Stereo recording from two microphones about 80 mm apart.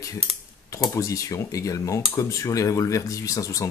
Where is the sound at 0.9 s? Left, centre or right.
Left.